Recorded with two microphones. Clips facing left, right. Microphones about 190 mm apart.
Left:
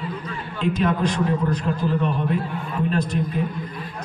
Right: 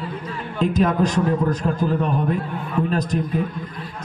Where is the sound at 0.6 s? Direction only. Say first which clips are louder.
Right 3 dB; 40° right (ahead or behind).